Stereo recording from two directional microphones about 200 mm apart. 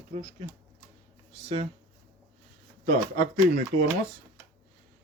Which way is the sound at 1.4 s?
35° right (ahead or behind).